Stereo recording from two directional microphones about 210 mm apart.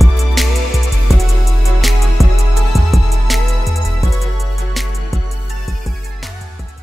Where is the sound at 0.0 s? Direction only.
Centre (ahead or behind).